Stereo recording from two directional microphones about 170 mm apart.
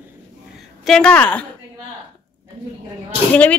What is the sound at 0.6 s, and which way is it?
Speech, centre (ahead or behind).